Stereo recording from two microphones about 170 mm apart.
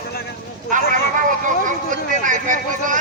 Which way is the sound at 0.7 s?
50° right (ahead or behind).